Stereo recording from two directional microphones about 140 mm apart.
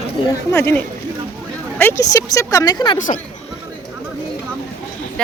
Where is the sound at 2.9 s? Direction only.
70° left (ahead or behind).